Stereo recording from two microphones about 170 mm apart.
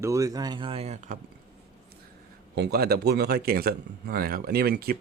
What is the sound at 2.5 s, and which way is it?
Speech, 70° right (ahead or behind).